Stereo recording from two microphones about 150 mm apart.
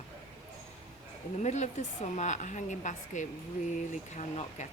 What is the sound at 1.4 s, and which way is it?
A woman's voice, 50° left (ahead or behind).